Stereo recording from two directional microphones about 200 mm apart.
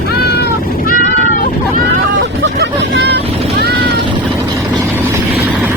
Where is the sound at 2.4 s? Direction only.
60° right (ahead or behind).